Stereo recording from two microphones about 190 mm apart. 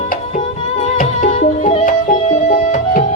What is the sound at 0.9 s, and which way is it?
Music, 40° left (ahead or behind).